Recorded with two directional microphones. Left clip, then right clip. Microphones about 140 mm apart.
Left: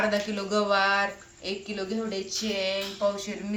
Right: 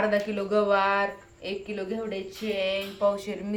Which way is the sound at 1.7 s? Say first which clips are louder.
Even; 30° right (ahead or behind).